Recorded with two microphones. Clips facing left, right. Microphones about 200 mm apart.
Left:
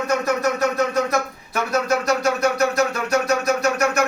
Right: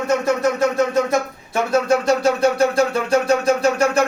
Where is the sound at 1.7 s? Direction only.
30° right (ahead or behind).